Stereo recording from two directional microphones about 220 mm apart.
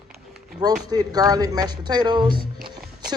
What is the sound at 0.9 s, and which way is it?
Speech, 15° right (ahead or behind).